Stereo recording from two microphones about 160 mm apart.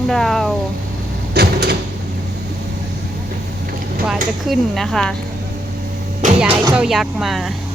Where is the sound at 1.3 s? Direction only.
90° right.